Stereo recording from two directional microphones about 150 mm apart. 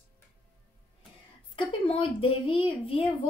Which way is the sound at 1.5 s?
35° left (ahead or behind).